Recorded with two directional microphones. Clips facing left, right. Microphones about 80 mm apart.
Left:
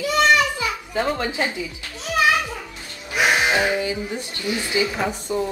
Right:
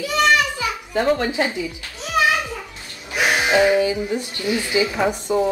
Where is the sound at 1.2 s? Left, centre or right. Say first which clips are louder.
Right 3 dB; right.